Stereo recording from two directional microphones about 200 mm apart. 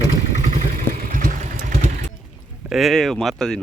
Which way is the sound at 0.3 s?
40° right (ahead or behind).